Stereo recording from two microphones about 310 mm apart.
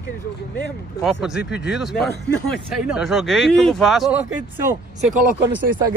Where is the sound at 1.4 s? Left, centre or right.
Left.